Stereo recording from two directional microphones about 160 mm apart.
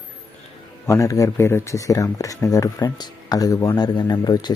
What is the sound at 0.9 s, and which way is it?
Speech, 20° left (ahead or behind).